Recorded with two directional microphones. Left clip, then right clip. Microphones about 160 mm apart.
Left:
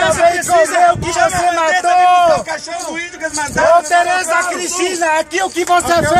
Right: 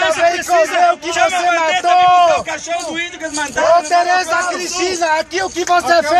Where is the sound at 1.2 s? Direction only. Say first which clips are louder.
Left 1 dB; 10° right (ahead or behind).